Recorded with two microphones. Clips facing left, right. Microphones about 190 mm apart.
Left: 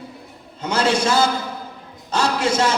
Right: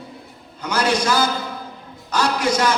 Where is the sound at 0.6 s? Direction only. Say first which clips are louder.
Left 1 dB; 25° left (ahead or behind).